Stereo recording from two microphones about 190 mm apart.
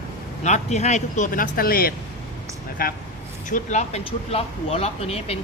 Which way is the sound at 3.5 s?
35° left (ahead or behind).